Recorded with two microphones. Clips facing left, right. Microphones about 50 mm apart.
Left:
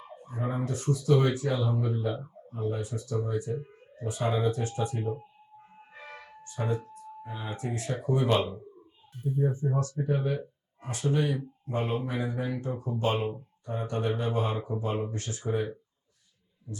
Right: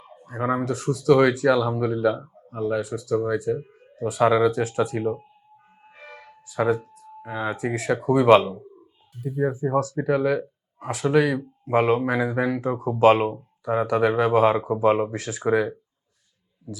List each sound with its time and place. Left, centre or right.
0.3 s speech: right
6.4 s speech: right